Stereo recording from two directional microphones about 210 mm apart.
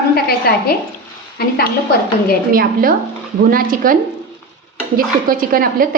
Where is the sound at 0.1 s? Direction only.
45° left (ahead or behind).